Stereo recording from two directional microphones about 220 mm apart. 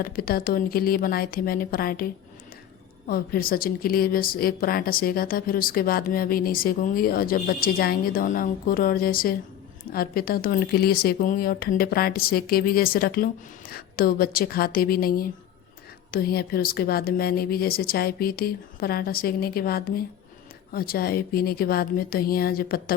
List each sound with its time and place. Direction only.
0.0 s a woman's voice: 40° left (ahead or behind)
3.1 s a woman's voice: 40° left (ahead or behind)